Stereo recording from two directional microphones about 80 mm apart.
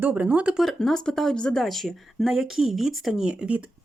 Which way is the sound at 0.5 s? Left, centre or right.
Centre.